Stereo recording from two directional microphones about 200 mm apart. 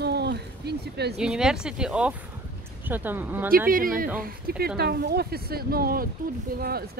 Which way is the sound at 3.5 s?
45° right (ahead or behind).